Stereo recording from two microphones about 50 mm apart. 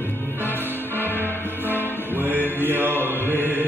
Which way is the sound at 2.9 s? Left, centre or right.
Left.